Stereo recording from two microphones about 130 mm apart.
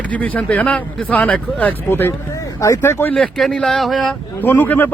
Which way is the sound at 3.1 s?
5° left (ahead or behind).